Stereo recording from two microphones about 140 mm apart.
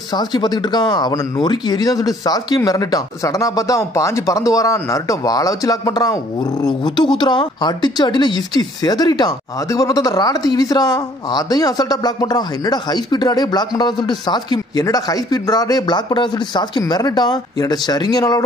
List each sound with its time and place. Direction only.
0.1 s speech: 30° left (ahead or behind)